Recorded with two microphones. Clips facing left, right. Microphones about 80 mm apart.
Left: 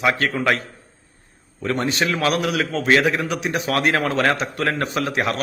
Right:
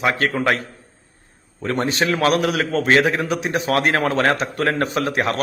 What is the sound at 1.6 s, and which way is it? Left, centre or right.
A man's voice, right.